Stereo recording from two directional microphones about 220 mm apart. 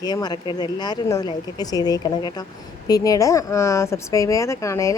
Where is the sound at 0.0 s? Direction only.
20° left (ahead or behind).